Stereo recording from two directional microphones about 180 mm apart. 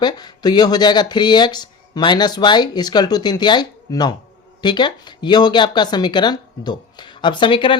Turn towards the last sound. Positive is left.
turn(degrees=30)  # may be behind; listen again after turning